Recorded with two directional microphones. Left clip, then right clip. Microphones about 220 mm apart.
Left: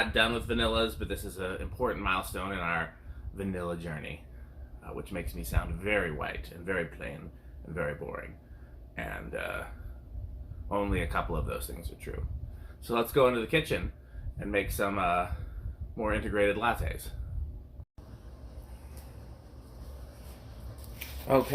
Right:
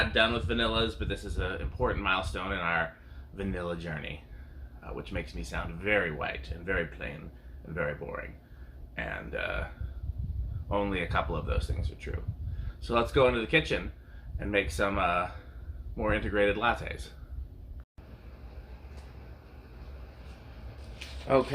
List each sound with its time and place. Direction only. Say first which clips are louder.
0.0 s speech: right 1 dB; centre (ahead or behind)
10.7 s speech: right 1 dB; centre (ahead or behind)
21.3 s speech: even; 15° left (ahead or behind)